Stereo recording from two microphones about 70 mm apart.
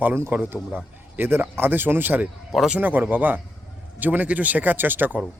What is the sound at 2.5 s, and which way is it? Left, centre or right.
Speech, centre.